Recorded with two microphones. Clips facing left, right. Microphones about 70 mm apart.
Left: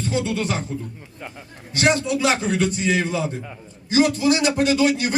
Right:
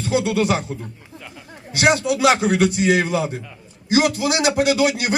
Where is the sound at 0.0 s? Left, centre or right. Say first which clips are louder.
Right 4 dB; right.